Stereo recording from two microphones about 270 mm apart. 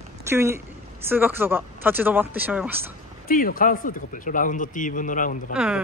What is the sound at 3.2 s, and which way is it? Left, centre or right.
Speech, left.